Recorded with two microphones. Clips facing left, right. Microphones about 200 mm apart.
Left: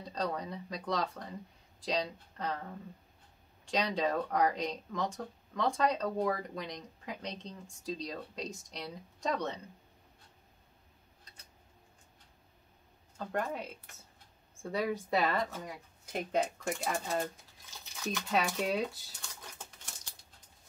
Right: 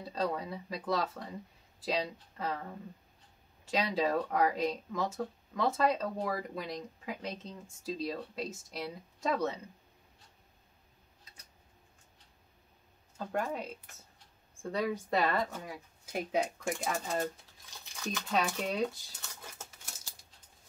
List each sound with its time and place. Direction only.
0.0 s speech: 5° right (ahead or behind)
3.6 s speech: 5° right (ahead or behind)
13.2 s speech: 5° right (ahead or behind)
19.4 s scissors: 5° right (ahead or behind)